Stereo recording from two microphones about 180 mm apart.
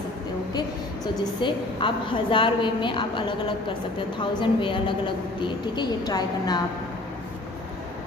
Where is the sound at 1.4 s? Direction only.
30° left (ahead or behind).